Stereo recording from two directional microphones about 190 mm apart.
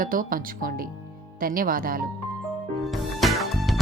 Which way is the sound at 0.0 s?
45° right (ahead or behind).